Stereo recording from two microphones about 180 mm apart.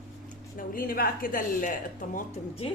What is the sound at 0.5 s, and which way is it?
A woman's voice, 50° left (ahead or behind).